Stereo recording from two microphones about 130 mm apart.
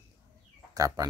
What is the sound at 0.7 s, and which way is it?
Speech, 25° right (ahead or behind).